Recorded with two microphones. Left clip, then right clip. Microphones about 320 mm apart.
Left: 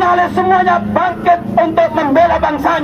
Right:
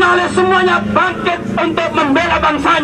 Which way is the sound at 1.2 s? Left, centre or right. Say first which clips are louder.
Left 5 dB; left.